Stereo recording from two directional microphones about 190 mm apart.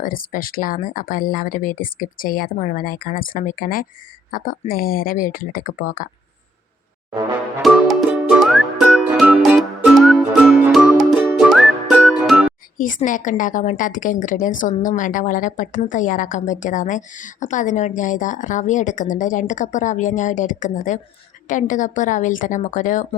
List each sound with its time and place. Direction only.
0.0 s speech: 45° left (ahead or behind)
7.6 s music: centre (ahead or behind)
12.7 s a woman's voice: 45° left (ahead or behind)